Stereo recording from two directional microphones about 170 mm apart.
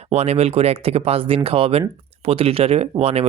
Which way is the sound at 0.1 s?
40° right (ahead or behind).